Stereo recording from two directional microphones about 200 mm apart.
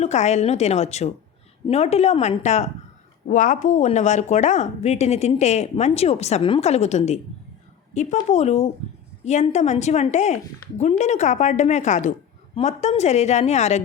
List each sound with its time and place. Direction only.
0.0 s speech: 35° left (ahead or behind)